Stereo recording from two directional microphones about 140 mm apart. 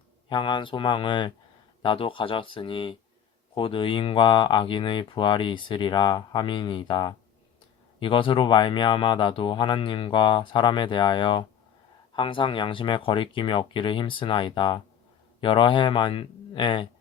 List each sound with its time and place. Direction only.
0.3 s speech: 35° left (ahead or behind)